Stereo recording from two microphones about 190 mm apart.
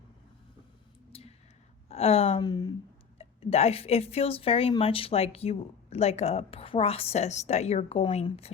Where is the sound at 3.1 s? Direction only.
30° left (ahead or behind).